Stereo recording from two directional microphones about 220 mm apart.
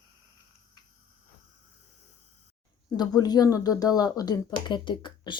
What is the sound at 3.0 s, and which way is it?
Speech, 20° left (ahead or behind).